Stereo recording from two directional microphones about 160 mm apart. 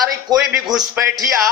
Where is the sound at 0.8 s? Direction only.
25° right (ahead or behind).